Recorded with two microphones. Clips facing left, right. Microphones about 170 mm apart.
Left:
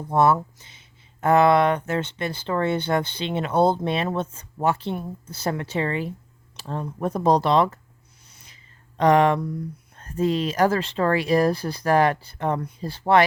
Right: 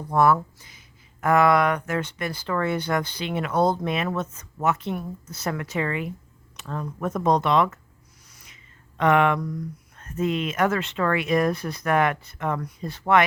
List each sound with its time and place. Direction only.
0.1 s speech: 25° left (ahead or behind)
8.3 s a sound: 30° left (ahead or behind)
9.0 s speech: 35° left (ahead or behind)